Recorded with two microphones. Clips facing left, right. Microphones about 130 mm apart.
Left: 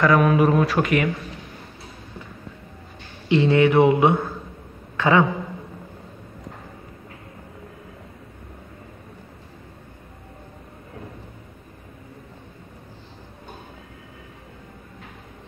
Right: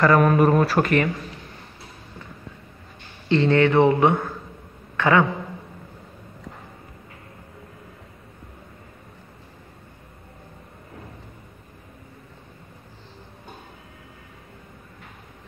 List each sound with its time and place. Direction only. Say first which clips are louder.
0.0 s speech: even; centre (ahead or behind)
3.3 s a man's voice: left 1 dB; 15° left (ahead or behind)